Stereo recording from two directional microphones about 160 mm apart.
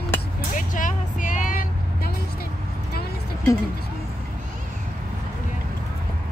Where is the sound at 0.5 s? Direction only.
55° left (ahead or behind).